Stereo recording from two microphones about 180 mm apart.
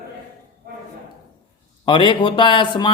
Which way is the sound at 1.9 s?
25° left (ahead or behind).